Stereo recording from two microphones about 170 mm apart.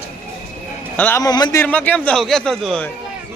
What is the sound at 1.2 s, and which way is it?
Speech, 20° left (ahead or behind).